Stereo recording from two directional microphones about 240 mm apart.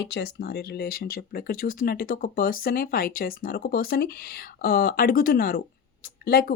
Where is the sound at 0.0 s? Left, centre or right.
Left.